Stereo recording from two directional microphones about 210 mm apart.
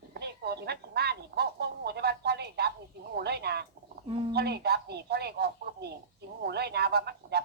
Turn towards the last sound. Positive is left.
turn(degrees=-50)  # may be behind; listen again after turning